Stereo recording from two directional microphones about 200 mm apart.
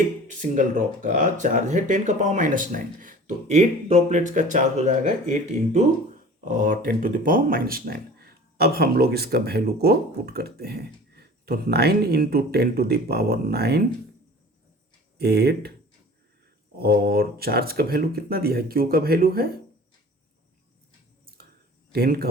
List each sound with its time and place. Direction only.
0.3 s speech: 40° right (ahead or behind)
15.2 s speech: 55° right (ahead or behind)
16.7 s speech: 50° right (ahead or behind)
21.9 s speech: 50° right (ahead or behind)